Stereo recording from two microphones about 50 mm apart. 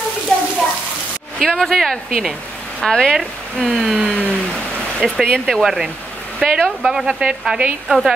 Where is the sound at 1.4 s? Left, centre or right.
Centre.